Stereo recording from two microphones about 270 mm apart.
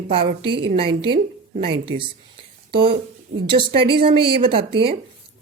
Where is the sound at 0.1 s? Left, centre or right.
Centre.